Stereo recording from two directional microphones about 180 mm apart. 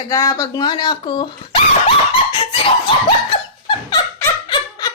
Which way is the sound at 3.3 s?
25° left (ahead or behind).